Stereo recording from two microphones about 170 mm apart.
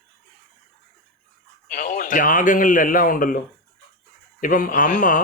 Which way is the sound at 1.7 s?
50° left (ahead or behind).